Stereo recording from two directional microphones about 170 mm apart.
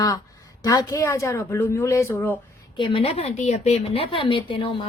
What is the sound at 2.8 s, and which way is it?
A woman's voice, 30° left (ahead or behind).